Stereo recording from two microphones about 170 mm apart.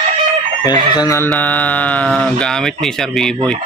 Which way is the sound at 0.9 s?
20° left (ahead or behind).